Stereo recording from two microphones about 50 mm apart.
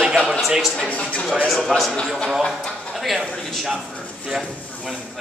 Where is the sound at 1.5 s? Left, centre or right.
Centre.